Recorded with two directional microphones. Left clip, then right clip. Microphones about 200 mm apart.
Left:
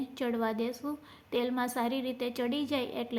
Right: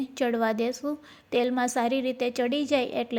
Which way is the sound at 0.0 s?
30° right (ahead or behind).